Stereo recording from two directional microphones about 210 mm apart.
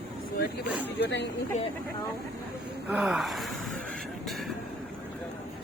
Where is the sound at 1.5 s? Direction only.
35° left (ahead or behind).